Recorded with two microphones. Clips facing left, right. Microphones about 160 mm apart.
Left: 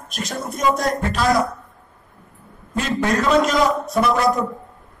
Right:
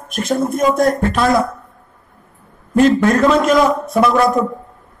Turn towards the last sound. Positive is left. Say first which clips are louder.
# right 4 dB
turn(degrees=-55)  # may be behind; listen again after turning